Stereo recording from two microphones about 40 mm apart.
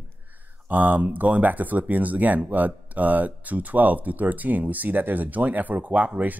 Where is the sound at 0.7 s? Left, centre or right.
Right.